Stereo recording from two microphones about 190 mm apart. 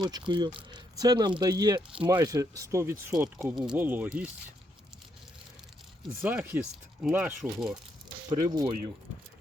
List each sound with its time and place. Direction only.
0.0 s speech: 25° right (ahead or behind); by 4.3 s 5° right (ahead or behind)
6.2 s speech: 10° right (ahead or behind)
8.3 s speech: 20° right (ahead or behind)